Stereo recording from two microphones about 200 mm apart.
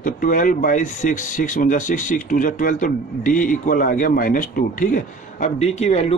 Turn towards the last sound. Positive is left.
turn(degrees=30)  # may be behind; listen again after turning